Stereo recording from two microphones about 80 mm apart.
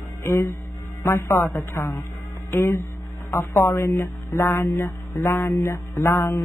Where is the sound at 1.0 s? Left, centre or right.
Left.